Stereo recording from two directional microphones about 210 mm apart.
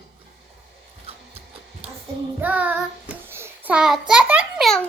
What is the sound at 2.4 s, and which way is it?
Child singing, 5° right (ahead or behind).